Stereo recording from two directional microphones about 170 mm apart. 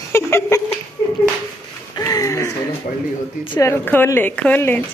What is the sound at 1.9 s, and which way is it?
Speech, 20° left (ahead or behind).